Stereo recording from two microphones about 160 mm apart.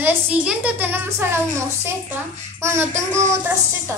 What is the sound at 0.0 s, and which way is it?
Speech, 10° right (ahead or behind).